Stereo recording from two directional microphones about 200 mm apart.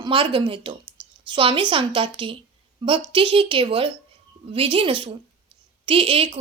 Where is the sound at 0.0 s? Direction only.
25° right (ahead or behind).